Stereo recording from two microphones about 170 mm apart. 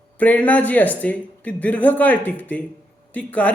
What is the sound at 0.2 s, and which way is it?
Speech, 10° left (ahead or behind).